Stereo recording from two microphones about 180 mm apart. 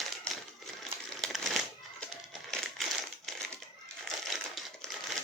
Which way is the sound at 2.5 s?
5° left (ahead or behind).